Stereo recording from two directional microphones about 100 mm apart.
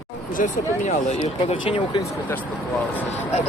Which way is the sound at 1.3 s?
65° left (ahead or behind).